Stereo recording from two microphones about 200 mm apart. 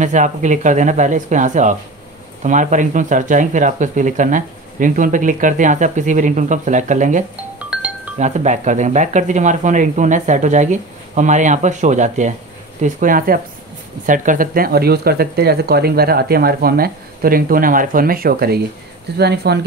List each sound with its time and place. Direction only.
0.0 s speech: 40° right (ahead or behind)
7.5 s music: 5° right (ahead or behind)
8.2 s speech: 35° right (ahead or behind); by 19.6 s 55° right (ahead or behind)